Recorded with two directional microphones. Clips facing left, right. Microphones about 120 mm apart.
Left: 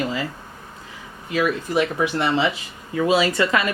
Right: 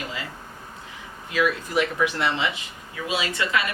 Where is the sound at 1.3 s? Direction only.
35° left (ahead or behind).